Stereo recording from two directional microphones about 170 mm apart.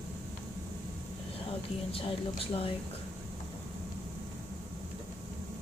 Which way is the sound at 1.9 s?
35° left (ahead or behind).